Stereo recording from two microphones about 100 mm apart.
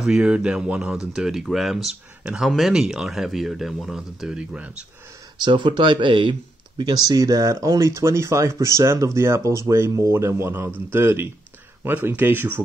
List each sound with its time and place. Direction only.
0.0 s speech: 5° right (ahead or behind)
5.4 s speech: 55° right (ahead or behind); by 12.6 s 20° right (ahead or behind)